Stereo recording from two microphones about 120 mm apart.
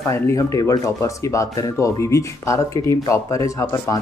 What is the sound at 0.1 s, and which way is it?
Speech, 25° left (ahead or behind).